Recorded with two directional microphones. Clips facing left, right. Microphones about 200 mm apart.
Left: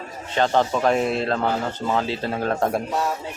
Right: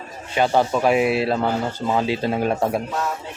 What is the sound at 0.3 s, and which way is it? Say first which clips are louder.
A man's voice: right 1 dB; 10° right (ahead or behind).